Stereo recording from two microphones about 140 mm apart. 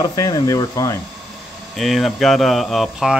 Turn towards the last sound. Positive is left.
turn(degrees=0)  # may be behind; listen again after turning